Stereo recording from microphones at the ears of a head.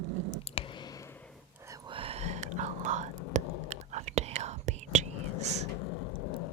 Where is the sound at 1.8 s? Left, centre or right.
Right.